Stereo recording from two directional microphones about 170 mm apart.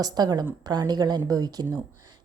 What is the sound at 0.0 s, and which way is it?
A woman's voice, 25° right (ahead or behind).